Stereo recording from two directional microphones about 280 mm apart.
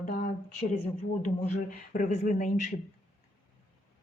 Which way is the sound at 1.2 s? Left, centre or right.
Left.